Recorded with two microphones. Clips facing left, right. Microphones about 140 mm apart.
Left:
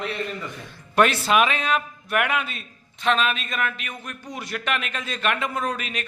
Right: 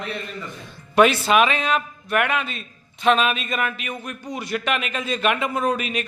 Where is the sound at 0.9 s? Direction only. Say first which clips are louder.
Right 3 dB; 5° right (ahead or behind).